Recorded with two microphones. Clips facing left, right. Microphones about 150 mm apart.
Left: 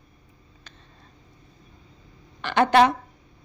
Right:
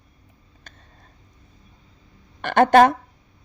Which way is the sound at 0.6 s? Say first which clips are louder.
Right 1 dB; 50° right (ahead or behind).